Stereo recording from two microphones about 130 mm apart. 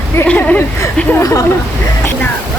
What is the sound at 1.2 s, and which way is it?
Speech, 25° left (ahead or behind).